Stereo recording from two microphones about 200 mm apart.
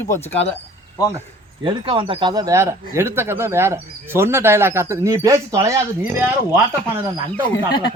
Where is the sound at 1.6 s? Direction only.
25° right (ahead or behind).